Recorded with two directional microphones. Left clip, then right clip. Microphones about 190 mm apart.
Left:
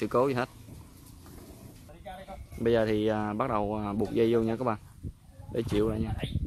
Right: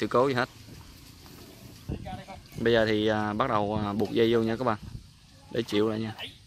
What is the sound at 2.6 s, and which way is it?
Speech, 5° right (ahead or behind).